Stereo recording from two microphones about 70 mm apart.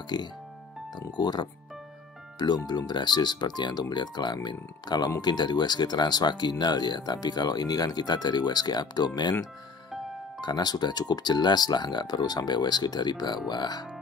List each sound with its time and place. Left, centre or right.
0.1 s speech: left
10.4 s speech: left